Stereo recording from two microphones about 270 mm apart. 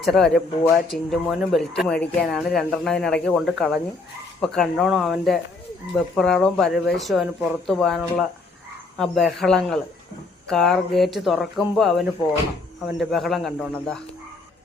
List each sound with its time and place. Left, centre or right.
0.0 s speech: centre